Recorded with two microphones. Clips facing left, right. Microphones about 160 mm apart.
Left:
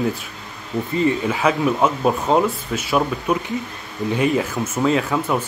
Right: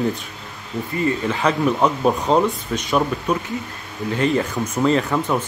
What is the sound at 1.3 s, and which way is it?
Speech, 5° left (ahead or behind).